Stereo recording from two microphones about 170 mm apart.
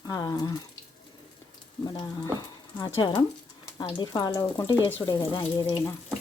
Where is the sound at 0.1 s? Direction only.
20° left (ahead or behind).